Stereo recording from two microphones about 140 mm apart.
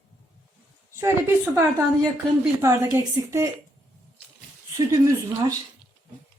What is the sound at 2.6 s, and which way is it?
Speech, 20° right (ahead or behind).